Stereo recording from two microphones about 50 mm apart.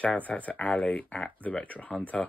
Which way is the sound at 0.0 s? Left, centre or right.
Left.